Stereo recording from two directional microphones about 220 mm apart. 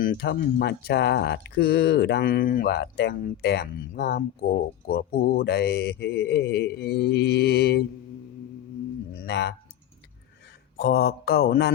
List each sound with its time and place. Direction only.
0.0 s speech: 45° left (ahead or behind)
9.1 s speech: 50° left (ahead or behind)
10.8 s speech: 45° left (ahead or behind)